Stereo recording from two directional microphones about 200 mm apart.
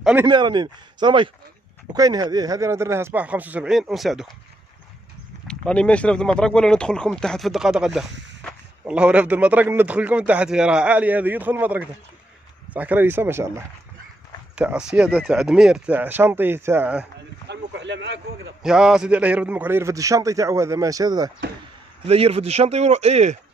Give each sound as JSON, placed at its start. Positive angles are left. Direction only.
{"t": 0.0, "sound": "speech", "side_deg": -10}
{"t": 0.3, "sound": "a man's voice", "side_deg": -20}
{"t": 5.5, "sound": "a man's voice", "side_deg": 5}
{"t": 14.5, "sound": "a man's voice", "side_deg": -5}
{"t": 17.5, "sound": "speech", "side_deg": -60}
{"t": 18.6, "sound": "a man's voice", "side_deg": -5}
{"t": 22.0, "sound": "speech", "side_deg": -30}